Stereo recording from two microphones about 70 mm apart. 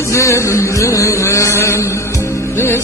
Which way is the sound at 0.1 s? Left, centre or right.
Left.